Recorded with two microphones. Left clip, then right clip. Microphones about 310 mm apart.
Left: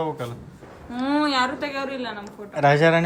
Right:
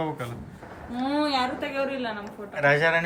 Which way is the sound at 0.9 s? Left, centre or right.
Centre.